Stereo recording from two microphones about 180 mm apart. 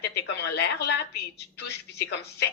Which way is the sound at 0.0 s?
70° left (ahead or behind).